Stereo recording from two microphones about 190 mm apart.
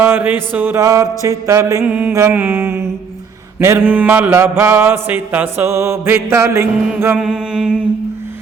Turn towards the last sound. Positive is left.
turn(degrees=-5)  # may be behind; listen again after turning